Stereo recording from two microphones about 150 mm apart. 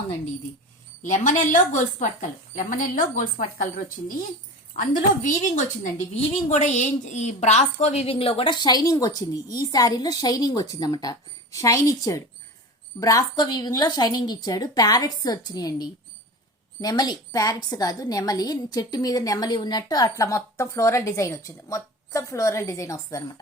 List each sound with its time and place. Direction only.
1.0 s a woman's voice: 55° left (ahead or behind); by 23.2 s 20° left (ahead or behind)